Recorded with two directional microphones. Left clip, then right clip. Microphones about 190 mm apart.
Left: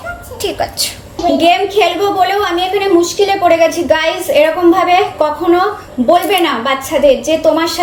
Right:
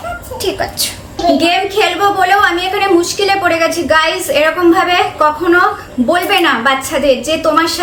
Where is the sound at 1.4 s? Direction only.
Centre (ahead or behind).